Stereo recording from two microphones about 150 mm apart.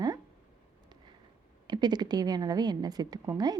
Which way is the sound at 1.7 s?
30° right (ahead or behind).